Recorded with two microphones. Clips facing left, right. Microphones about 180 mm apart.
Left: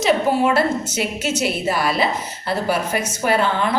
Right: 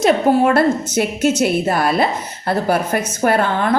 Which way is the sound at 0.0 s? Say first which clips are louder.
Right 4 dB; 55° right (ahead or behind).